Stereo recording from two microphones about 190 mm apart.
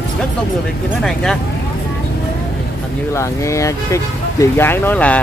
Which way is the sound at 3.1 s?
15° left (ahead or behind).